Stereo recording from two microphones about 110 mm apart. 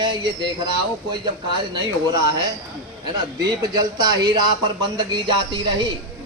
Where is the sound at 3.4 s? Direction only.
35° right (ahead or behind).